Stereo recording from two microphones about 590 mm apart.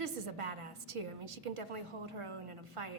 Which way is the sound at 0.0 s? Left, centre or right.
Right.